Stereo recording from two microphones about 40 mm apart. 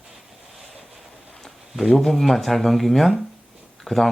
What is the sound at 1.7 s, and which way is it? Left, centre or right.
Speech, centre.